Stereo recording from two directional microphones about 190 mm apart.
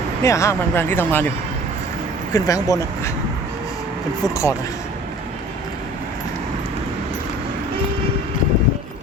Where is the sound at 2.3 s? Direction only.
20° left (ahead or behind).